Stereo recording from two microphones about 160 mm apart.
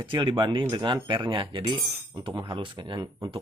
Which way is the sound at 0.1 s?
30° right (ahead or behind).